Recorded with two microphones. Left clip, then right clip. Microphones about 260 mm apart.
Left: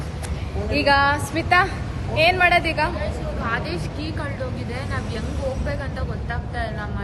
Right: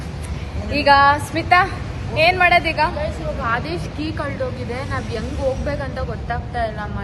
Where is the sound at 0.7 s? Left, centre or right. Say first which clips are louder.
Right 5 dB; centre.